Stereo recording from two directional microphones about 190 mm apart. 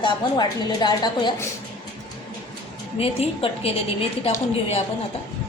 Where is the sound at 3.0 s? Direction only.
30° left (ahead or behind).